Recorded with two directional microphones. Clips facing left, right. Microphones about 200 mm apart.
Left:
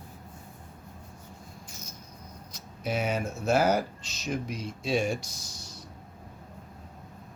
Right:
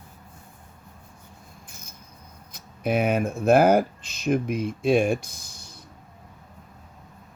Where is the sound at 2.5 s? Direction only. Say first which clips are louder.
Right 7 dB; 55° right (ahead or behind).